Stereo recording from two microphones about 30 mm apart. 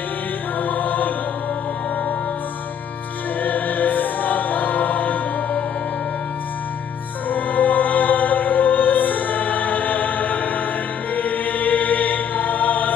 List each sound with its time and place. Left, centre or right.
0.6 s music: left
3.4 s music: left
7.2 s music: left
11.1 s choir: left